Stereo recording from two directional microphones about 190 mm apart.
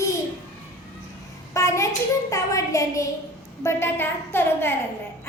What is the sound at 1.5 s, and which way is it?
A woman's voice, 15° left (ahead or behind).